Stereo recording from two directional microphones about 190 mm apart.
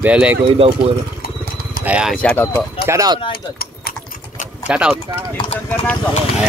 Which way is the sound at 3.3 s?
50° left (ahead or behind).